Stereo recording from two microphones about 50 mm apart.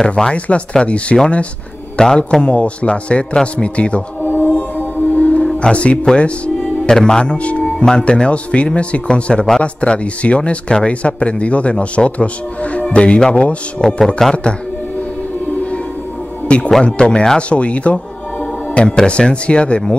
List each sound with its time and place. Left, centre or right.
0.0 s a man's voice: centre
2.0 s a man's voice: centre
4.2 s music: left
5.6 s a man's voice: left
6.0 s music: left
7.0 s a man's voice: centre
13.7 s speech: centre
16.4 s speech: left
17.4 s a man's voice: left